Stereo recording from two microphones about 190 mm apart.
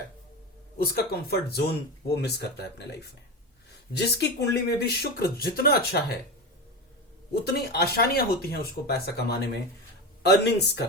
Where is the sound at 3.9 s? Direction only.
60° left (ahead or behind).